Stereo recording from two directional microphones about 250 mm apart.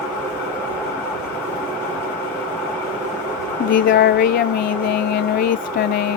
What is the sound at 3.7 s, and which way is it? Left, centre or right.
Speech, left.